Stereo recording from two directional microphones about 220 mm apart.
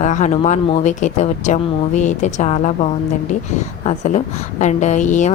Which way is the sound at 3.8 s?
30° left (ahead or behind).